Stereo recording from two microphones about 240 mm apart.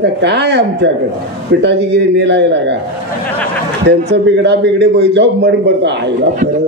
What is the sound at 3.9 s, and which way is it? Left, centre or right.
A man's voice, right.